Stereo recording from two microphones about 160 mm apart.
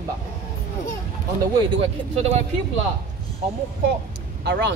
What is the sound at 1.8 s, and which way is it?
Speech, 40° right (ahead or behind).